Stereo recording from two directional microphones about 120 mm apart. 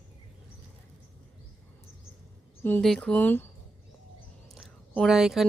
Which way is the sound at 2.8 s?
5° left (ahead or behind).